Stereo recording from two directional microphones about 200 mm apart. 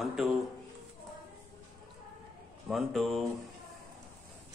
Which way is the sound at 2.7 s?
Centre (ahead or behind).